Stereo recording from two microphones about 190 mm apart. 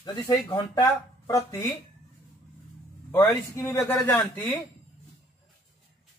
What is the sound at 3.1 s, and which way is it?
A man's voice, 10° left (ahead or behind).